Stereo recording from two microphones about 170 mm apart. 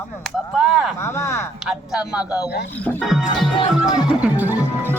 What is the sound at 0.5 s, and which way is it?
Music, 5° right (ahead or behind).